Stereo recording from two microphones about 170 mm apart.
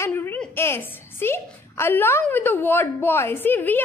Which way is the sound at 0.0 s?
10° left (ahead or behind).